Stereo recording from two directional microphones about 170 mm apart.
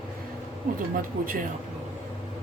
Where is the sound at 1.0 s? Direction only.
55° right (ahead or behind).